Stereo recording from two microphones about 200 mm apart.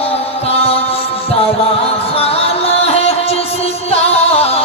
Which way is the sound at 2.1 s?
30° left (ahead or behind).